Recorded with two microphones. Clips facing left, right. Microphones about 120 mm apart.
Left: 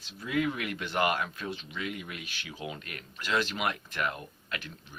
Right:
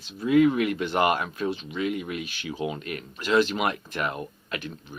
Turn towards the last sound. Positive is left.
turn(degrees=-25)  # may be behind; listen again after turning